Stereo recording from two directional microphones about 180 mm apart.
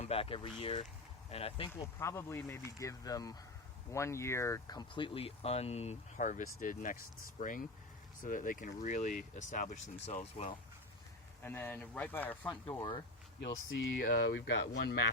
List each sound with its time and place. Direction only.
0.0 s speech: 30° left (ahead or behind)
2.0 s speech: 15° left (ahead or behind); by 10.6 s 35° left (ahead or behind)
11.4 s speech: 10° left (ahead or behind)
13.4 s speech: 70° left (ahead or behind)